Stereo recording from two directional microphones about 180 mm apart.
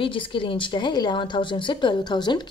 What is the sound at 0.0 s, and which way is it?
A woman's voice, 30° left (ahead or behind).